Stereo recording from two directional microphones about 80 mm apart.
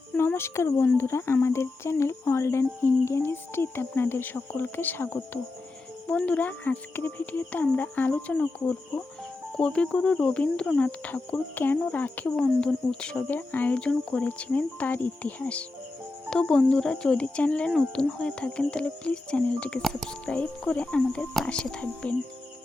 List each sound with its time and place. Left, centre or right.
0.3 s speech: left
6.1 s speech: centre